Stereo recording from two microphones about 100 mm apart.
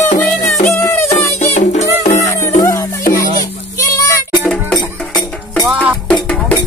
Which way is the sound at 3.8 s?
30° left (ahead or behind).